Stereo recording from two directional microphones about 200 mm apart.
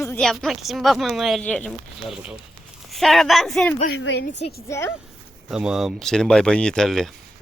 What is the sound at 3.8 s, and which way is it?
Speech, 55° left (ahead or behind).